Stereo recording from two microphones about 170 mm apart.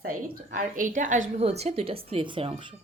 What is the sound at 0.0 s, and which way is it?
A woman's voice, 55° right (ahead or behind).